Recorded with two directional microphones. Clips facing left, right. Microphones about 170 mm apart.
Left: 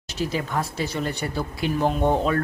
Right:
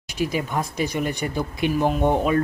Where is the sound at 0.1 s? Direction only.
15° right (ahead or behind).